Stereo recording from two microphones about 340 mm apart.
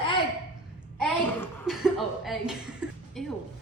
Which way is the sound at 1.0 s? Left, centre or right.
Centre.